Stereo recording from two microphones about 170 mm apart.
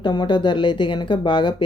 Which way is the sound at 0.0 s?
25° left (ahead or behind).